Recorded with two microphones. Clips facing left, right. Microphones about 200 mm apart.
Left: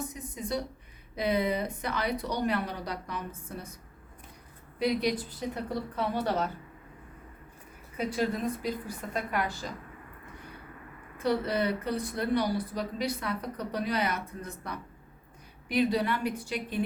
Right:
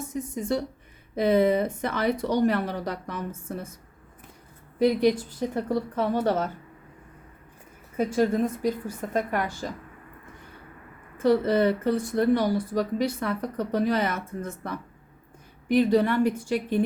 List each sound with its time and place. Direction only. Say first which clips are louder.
0.1 s speech: right 7 dB; 50° right (ahead or behind)
4.8 s speech: right 7 dB; 50° right (ahead or behind)
7.9 s speech: right 7 dB; 50° right (ahead or behind)
11.2 s speech: right 7 dB; 50° right (ahead or behind)
15.9 s speech: right 8 dB; 50° right (ahead or behind)